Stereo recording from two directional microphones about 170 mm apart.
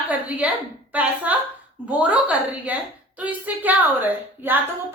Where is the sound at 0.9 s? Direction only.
10° right (ahead or behind).